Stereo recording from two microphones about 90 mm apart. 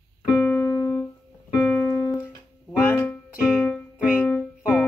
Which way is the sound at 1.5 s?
Centre (ahead or behind).